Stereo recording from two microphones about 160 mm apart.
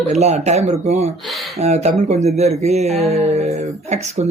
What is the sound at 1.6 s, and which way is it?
Speech, 40° right (ahead or behind).